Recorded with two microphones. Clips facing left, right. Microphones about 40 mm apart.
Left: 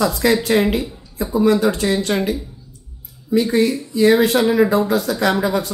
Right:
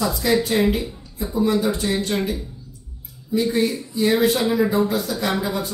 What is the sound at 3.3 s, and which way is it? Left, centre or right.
Speech, left.